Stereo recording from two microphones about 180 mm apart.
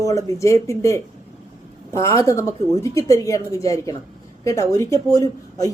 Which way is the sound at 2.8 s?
20° left (ahead or behind).